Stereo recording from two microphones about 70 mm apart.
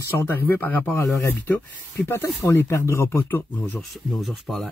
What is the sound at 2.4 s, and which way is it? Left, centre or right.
Speech, left.